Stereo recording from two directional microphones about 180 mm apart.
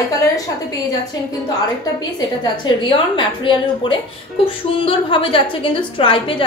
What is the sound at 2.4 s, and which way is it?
A woman's voice, 25° left (ahead or behind).